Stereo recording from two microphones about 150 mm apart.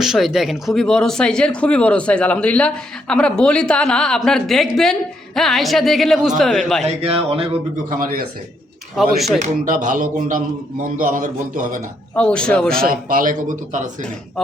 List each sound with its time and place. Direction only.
0.0 s speech: centre (ahead or behind)
6.8 s speech: 40° right (ahead or behind)
7.9 s a man's voice: 70° right (ahead or behind)
9.1 s speech: centre (ahead or behind)
9.4 s speech: 60° right (ahead or behind)
12.1 s speech: 10° left (ahead or behind)
12.9 s a man's voice: 65° right (ahead or behind)